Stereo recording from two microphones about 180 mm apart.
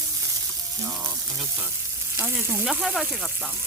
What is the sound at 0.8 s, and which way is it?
Frying, 20° right (ahead or behind).